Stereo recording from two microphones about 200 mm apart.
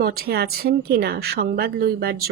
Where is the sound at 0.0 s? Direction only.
50° right (ahead or behind).